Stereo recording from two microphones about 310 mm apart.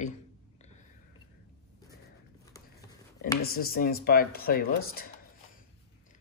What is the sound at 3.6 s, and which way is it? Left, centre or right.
Speech, left.